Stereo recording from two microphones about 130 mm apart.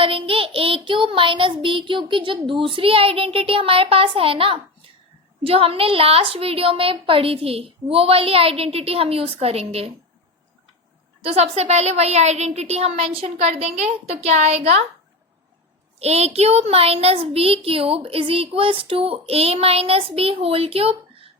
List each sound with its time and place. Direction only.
0.0 s child singing: 45° right (ahead or behind)
2.5 s a child's voice: 40° right (ahead or behind)
11.2 s a woman's voice: 50° right (ahead or behind)
16.0 s a child's voice: 55° right (ahead or behind)